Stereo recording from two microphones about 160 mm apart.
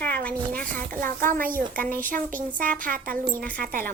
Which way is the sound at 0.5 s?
60° right (ahead or behind).